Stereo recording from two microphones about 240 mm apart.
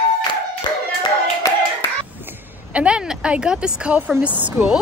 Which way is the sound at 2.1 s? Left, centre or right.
Centre.